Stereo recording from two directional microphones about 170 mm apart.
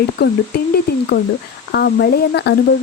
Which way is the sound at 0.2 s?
75° left (ahead or behind).